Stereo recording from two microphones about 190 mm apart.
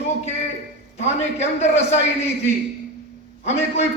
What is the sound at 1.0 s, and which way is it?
Speech, 35° left (ahead or behind).